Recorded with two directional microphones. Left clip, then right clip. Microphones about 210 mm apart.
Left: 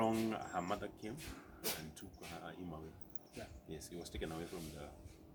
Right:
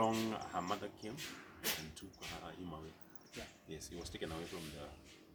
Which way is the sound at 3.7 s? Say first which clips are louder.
Right 1 dB; 15° left (ahead or behind).